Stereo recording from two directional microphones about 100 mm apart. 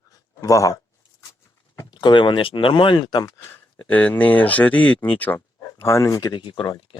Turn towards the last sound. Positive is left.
turn(degrees=60)  # may be behind; listen again after turning